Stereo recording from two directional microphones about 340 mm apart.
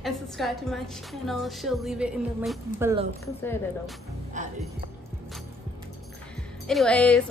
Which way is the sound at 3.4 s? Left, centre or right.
Centre.